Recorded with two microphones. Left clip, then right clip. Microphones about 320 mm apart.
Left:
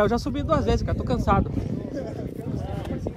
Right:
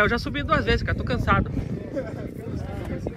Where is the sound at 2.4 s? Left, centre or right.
Left.